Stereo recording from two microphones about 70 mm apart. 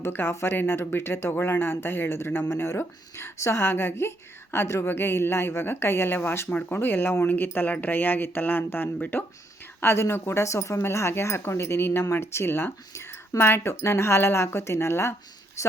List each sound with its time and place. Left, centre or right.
0.0 s speech: left
6.5 s speech: left